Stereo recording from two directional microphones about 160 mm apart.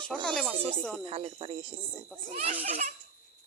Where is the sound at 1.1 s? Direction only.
35° right (ahead or behind).